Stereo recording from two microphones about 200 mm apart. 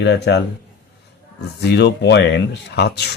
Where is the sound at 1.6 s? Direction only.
55° left (ahead or behind).